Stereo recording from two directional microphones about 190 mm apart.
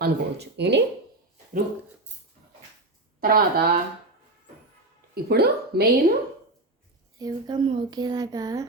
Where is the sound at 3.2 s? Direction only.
50° right (ahead or behind).